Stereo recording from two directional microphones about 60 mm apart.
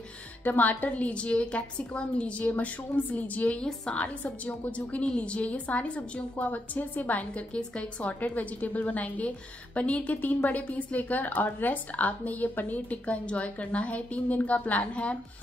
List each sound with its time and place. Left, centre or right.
0.4 s a woman's voice: left
3.6 s a woman's voice: centre
4.0 s a woman's voice: left